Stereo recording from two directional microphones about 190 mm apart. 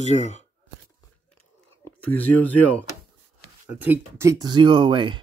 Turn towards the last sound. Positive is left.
turn(degrees=-25)  # may be behind; listen again after turning